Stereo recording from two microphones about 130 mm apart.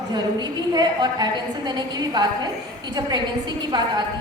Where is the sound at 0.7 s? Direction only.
30° right (ahead or behind).